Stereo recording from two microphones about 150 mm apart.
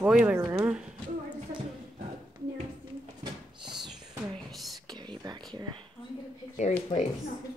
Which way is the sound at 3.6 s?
5° right (ahead or behind).